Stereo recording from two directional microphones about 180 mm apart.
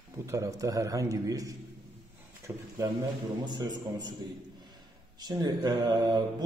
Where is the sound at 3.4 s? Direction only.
25° right (ahead or behind).